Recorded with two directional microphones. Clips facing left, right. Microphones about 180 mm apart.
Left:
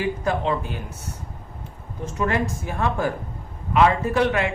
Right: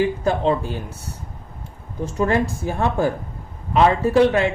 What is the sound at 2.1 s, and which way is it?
A man's voice, 35° right (ahead or behind).